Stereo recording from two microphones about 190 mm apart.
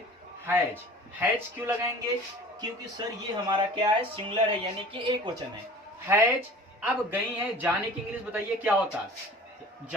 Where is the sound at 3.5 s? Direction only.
25° right (ahead or behind).